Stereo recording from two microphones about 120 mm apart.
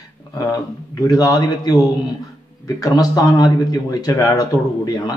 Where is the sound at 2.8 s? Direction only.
30° left (ahead or behind).